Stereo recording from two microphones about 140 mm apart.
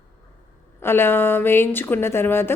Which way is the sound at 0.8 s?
15° left (ahead or behind).